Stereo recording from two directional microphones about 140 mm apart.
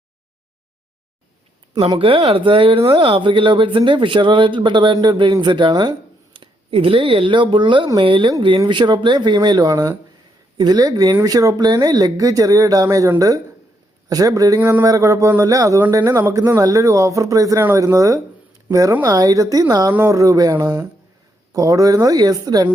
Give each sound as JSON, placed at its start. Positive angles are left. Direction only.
{"t": 1.9, "sound": "a man's voice", "side_deg": -40}